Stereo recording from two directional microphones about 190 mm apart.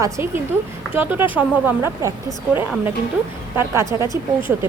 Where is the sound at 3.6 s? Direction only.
15° right (ahead or behind).